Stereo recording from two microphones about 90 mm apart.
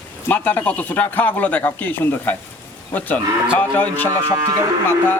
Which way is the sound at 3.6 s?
20° left (ahead or behind).